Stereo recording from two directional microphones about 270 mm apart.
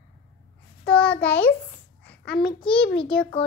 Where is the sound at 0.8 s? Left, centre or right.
Centre.